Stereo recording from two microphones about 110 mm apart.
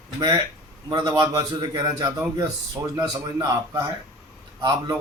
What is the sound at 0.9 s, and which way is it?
A man's voice, 40° right (ahead or behind).